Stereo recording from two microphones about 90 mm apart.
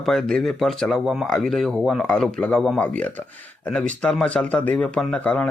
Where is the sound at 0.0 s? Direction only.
5° left (ahead or behind).